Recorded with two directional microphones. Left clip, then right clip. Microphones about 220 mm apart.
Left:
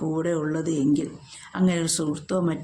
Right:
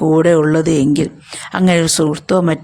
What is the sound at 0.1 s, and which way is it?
Speech, 40° right (ahead or behind).